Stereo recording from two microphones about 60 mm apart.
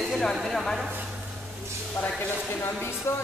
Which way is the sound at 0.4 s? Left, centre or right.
Centre.